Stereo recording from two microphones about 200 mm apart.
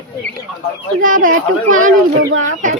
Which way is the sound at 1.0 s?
40° right (ahead or behind).